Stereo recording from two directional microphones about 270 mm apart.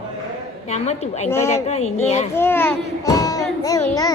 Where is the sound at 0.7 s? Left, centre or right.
Left.